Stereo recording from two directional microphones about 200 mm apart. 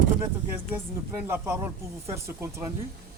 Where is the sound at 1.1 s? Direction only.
10° right (ahead or behind).